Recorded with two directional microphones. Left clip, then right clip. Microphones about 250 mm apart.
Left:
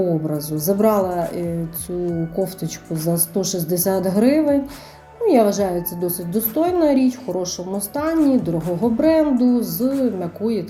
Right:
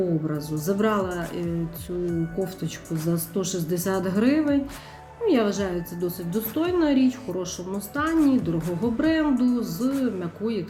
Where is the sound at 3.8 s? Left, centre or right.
Centre.